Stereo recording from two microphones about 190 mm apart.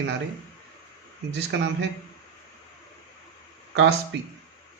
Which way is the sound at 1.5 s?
70° right (ahead or behind).